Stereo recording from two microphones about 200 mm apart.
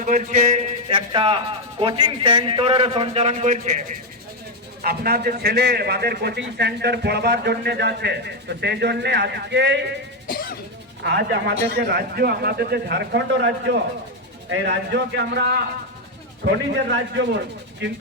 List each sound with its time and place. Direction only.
0.0 s a man's voice: 40° right (ahead or behind)
0.9 s a man's voice: 25° right (ahead or behind)
4.8 s a man's voice: 50° right (ahead or behind)
10.2 s music: 45° left (ahead or behind)
11.0 s a man's voice: 60° right (ahead or behind)